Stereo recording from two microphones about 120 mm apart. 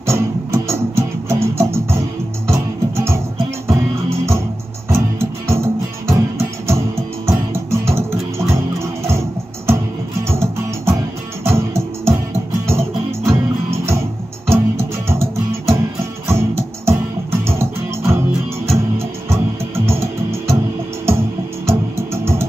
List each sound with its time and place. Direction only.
0.0 s music: 20° right (ahead or behind)
10.2 s music: 20° right (ahead or behind)
21.6 s music: 20° right (ahead or behind)